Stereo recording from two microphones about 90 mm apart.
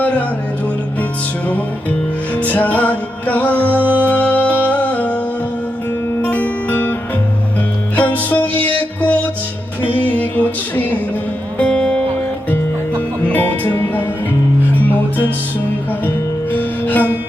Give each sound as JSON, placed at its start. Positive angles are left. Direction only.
{"t": 1.5, "sound": "music", "side_deg": 15}
{"t": 3.8, "sound": "music", "side_deg": -20}
{"t": 4.1, "sound": "music", "side_deg": 20}
{"t": 6.2, "sound": "music", "side_deg": 20}
{"t": 8.1, "sound": "music", "side_deg": 20}
{"t": 9.8, "sound": "music", "side_deg": -20}
{"t": 10.2, "sound": "music", "side_deg": 15}
{"t": 13.2, "sound": "music", "side_deg": 20}
{"t": 15.9, "sound": "music", "side_deg": 20}